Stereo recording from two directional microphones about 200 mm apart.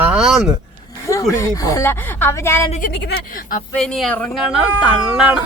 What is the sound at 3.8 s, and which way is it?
Speech, 5° left (ahead or behind).